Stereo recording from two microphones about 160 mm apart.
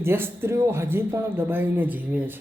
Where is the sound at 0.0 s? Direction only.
15° right (ahead or behind).